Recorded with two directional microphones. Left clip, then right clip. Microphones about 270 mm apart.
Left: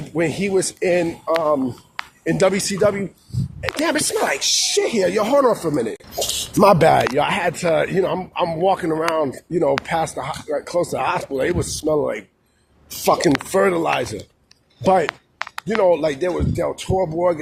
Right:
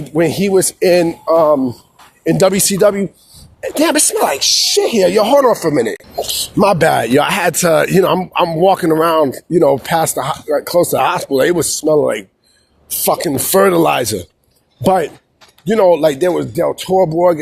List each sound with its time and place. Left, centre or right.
0.1 s speech: right
6.9 s speech: right
11.8 s speech: right
15.6 s speech: right